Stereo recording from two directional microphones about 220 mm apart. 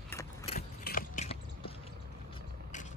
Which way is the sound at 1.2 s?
25° left (ahead or behind).